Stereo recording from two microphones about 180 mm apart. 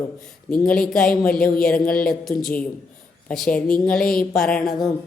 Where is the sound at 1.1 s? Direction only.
50° left (ahead or behind).